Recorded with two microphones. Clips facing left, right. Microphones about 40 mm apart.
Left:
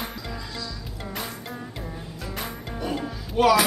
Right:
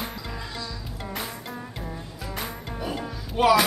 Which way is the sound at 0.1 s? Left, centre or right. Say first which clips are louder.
Left 1 dB; centre.